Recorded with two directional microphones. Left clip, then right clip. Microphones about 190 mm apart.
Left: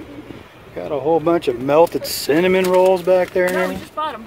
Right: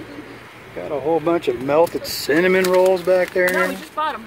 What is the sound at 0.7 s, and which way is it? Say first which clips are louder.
Speech: left 2 dB; 20° left (ahead or behind).